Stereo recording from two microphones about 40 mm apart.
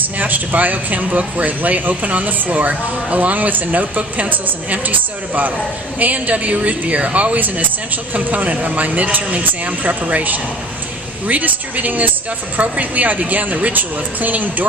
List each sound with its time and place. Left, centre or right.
0.2 s a man's voice: right